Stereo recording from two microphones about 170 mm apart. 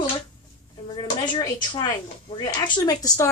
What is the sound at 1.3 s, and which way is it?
Speech, 20° left (ahead or behind).